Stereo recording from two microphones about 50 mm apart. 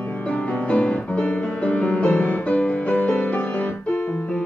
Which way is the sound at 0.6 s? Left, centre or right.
Left.